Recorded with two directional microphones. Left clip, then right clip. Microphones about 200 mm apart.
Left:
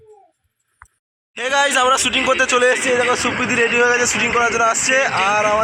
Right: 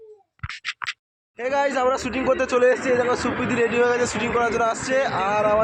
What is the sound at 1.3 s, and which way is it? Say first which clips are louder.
A man's voice: left 6 dB; centre (ahead or behind).